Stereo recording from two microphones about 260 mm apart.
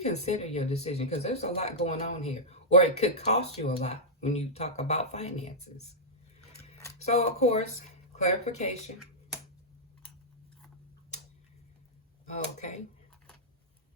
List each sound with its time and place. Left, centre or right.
0.0 s speech: left
12.2 s speech: left